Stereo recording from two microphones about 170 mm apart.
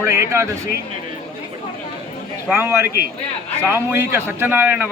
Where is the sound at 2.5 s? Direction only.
10° right (ahead or behind).